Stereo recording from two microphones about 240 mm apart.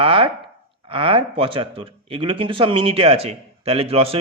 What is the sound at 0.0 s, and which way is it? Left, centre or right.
A man's voice, right.